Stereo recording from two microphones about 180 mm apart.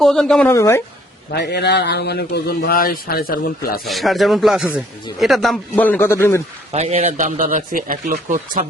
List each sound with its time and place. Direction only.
0.0 s speech: centre (ahead or behind)
0.4 s speech: 15° left (ahead or behind)
1.3 s a man's voice: 65° left (ahead or behind)
3.8 s speech: centre (ahead or behind)
6.7 s speech: 35° right (ahead or behind)